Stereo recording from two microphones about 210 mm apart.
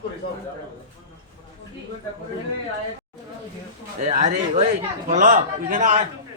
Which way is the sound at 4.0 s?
30° right (ahead or behind).